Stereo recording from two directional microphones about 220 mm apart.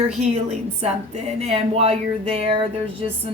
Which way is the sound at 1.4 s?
30° right (ahead or behind).